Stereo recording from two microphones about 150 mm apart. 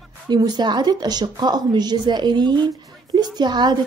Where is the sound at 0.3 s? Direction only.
25° right (ahead or behind).